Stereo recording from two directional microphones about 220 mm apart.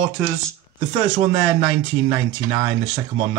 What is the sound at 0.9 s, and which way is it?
Speech, 20° right (ahead or behind).